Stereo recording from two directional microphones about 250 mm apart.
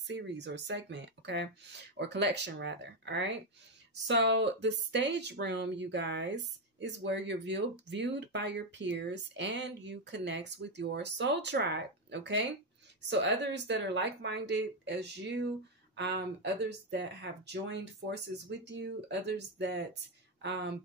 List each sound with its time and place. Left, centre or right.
0.0 s speech: right